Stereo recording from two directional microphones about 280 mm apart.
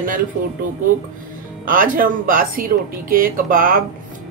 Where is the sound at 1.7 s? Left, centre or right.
Right.